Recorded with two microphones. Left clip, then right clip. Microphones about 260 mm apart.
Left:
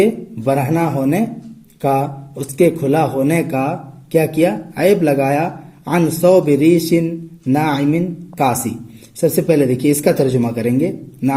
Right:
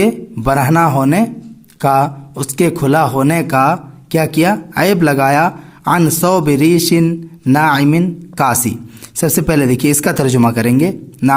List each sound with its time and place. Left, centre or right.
0.0 s a man's voice: right